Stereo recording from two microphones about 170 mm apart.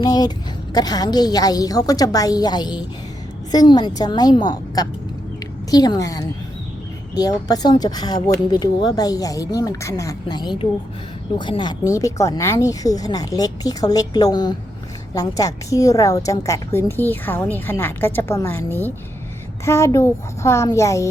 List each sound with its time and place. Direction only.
0.0 s a woman's voice: 25° left (ahead or behind)